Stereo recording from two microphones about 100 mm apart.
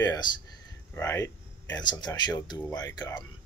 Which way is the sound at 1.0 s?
30° left (ahead or behind).